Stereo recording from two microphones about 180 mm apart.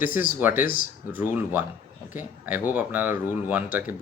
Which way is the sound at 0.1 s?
50° left (ahead or behind).